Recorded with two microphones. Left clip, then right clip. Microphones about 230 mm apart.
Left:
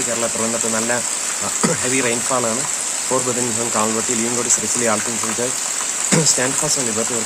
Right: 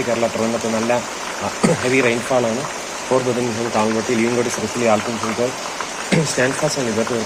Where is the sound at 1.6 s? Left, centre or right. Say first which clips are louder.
Right 4 dB; left.